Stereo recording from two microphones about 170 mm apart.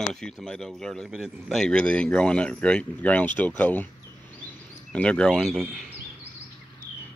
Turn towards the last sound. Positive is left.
turn(degrees=0)  # may be behind; listen again after turning